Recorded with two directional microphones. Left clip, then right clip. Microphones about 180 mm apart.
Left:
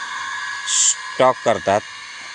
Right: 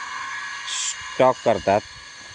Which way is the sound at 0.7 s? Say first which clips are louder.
Left 11 dB; 10° right (ahead or behind).